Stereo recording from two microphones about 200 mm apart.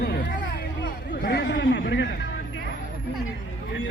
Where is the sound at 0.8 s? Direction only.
55° left (ahead or behind).